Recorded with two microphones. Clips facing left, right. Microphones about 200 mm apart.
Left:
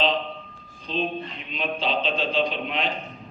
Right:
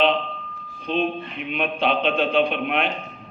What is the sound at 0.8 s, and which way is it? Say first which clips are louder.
Speech: right 4 dB; 60° right (ahead or behind).